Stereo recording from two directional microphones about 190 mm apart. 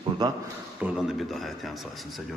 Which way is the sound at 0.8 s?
Centre (ahead or behind).